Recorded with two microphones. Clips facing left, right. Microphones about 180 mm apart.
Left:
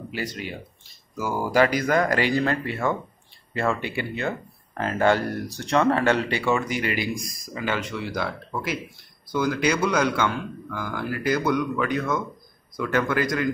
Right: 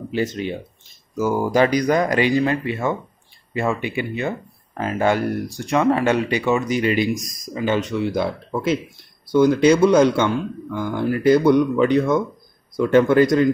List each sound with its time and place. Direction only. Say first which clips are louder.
0.1 s a man's voice: right 9 dB; 25° right (ahead or behind)